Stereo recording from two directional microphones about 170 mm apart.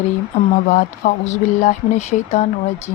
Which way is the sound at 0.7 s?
45° left (ahead or behind).